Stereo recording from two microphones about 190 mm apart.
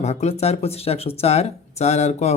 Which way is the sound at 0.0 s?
35° left (ahead or behind).